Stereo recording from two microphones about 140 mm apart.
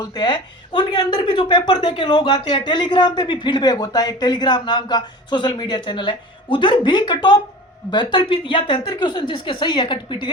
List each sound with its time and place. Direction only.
0.0 s speech: 30° left (ahead or behind)